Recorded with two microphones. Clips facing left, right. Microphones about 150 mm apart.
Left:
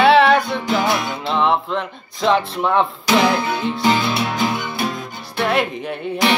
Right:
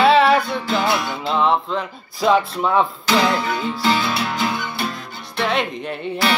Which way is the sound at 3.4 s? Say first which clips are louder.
Left 2 dB; 20° left (ahead or behind).